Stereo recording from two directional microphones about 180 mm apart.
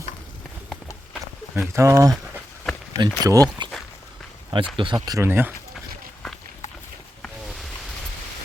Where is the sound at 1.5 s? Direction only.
15° right (ahead or behind).